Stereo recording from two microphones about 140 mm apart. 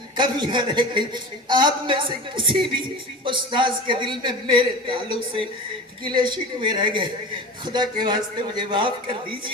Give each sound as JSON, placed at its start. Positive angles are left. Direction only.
{"t": 0.2, "sound": "a woman's voice", "side_deg": -35}